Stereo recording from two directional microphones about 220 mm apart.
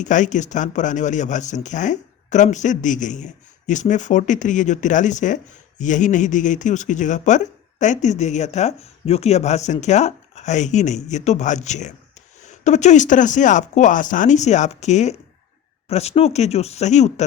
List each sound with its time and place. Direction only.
0.0 s speech: 35° left (ahead or behind)